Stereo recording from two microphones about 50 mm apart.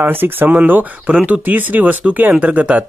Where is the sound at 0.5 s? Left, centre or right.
Right.